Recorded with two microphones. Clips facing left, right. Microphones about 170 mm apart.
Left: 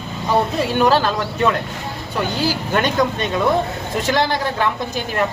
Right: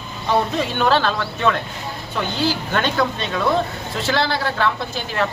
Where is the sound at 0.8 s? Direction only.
10° left (ahead or behind).